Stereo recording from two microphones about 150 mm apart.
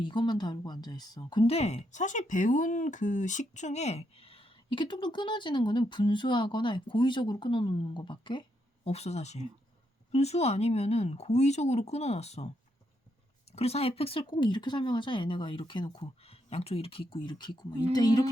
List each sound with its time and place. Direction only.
0.0 s speech: 30° left (ahead or behind); by 12.5 s 45° left (ahead or behind)
13.6 s speech: 45° left (ahead or behind); by 18.3 s 25° left (ahead or behind)